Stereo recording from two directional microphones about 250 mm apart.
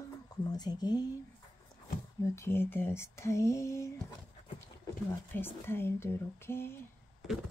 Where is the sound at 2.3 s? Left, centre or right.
Centre.